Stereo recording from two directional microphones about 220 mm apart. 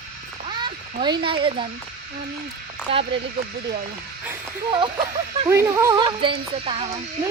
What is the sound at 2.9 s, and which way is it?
Speech, 25° right (ahead or behind).